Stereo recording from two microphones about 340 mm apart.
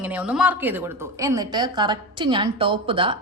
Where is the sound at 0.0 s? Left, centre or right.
Centre.